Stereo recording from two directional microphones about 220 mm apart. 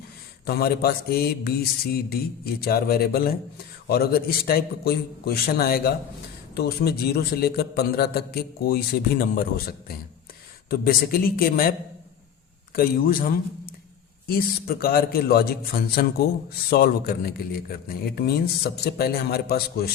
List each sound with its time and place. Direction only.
0.4 s a man's voice: 45° left (ahead or behind)
12.7 s a man's voice: 40° left (ahead or behind)